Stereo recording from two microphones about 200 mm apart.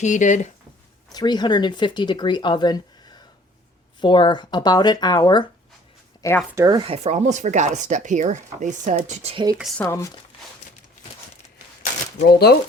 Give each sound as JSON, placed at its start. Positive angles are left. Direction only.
{"t": 0.0, "sound": "speech", "side_deg": 40}
{"t": 1.1, "sound": "speech", "side_deg": 20}
{"t": 6.6, "sound": "speech", "side_deg": -20}
{"t": 9.6, "sound": "speech", "side_deg": 0}
{"t": 9.8, "sound": "speech", "side_deg": 15}
{"t": 12.3, "sound": "speech", "side_deg": 55}